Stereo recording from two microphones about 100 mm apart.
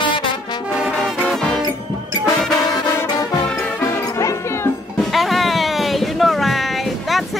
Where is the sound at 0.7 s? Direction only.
5° right (ahead or behind).